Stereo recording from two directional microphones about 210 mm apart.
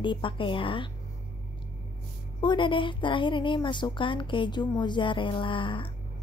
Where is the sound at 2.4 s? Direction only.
25° left (ahead or behind).